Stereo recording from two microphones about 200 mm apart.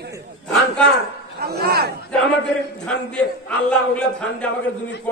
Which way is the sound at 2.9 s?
5° left (ahead or behind).